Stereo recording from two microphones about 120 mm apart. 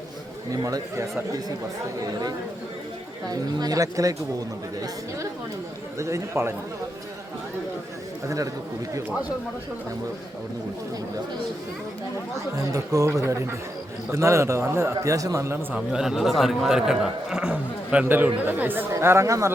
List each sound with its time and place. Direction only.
0.5 s speech: 30° right (ahead or behind)
3.2 s speech: 30° right (ahead or behind)
6.0 s speech: 25° right (ahead or behind)
12.5 s speech: 30° right (ahead or behind)
15.7 s a man's voice: 5° right (ahead or behind); by 19.5 s 25° right (ahead or behind)